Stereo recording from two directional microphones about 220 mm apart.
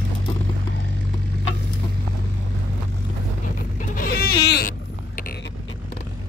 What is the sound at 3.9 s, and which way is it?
Vehicle, 45° left (ahead or behind).